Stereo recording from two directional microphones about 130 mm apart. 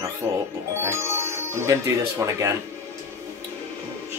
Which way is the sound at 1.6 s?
25° right (ahead or behind).